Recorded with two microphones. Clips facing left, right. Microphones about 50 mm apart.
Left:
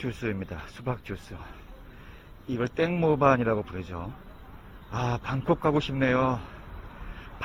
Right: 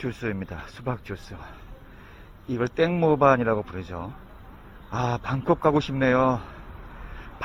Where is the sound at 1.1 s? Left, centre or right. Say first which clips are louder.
Right 2 dB; right.